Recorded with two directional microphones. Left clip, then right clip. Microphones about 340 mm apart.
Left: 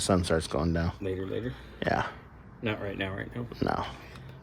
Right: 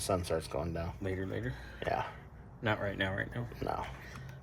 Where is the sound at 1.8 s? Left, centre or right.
Left.